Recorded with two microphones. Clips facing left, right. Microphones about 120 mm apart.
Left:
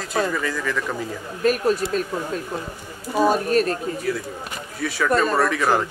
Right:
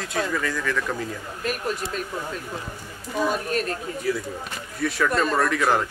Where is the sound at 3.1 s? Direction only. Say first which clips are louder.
Left 6 dB; 35° left (ahead or behind).